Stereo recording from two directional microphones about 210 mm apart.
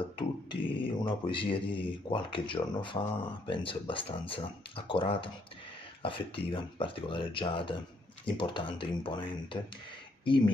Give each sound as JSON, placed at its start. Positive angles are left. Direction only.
{"t": 0.2, "sound": "speech", "side_deg": 25}